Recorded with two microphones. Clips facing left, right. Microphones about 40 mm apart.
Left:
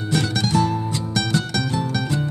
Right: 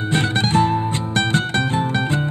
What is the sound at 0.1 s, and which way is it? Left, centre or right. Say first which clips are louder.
Music: right 2 dB; right.